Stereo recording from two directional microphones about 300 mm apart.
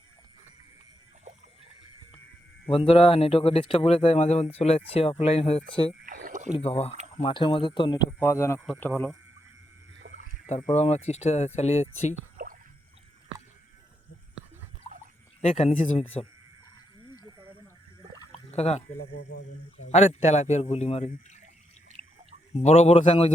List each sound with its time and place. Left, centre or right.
2.7 s speech: centre
6.1 s rowboat: right
6.5 s speech: centre
10.0 s a sound: right
10.4 s speech: left
12.4 s a sound: right
15.4 s speech: left
18.2 s a sound: left
19.8 s speech: left
22.5 s speech: left